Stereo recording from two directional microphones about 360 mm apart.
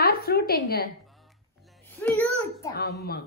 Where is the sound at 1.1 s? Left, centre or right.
Centre.